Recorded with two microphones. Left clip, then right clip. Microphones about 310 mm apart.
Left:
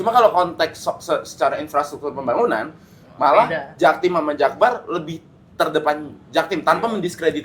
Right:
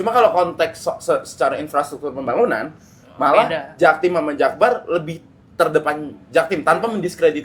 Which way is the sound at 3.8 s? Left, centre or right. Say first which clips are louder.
Right 1 dB; right.